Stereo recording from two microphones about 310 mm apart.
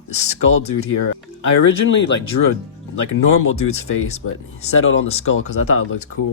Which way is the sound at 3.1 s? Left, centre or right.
Left.